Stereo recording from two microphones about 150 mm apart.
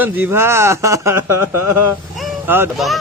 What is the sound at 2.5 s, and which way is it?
Speech, 15° right (ahead or behind).